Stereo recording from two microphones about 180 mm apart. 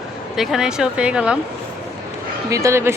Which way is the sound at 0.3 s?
Centre (ahead or behind).